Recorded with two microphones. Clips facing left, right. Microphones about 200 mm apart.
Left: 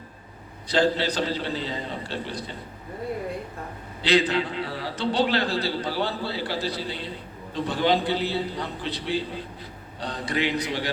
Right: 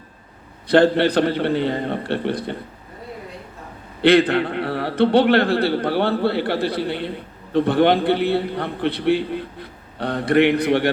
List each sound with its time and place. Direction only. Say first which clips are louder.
0.7 s a man's voice: right 8 dB; 60° right (ahead or behind)
4.0 s a man's voice: right 7 dB; 55° right (ahead or behind)